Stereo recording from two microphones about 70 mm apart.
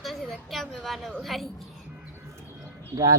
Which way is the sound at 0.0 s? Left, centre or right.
Centre.